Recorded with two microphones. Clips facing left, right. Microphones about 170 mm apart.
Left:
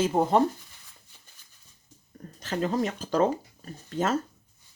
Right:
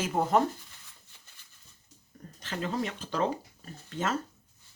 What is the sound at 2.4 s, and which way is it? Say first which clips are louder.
Speech: left 5 dB; 40° left (ahead or behind).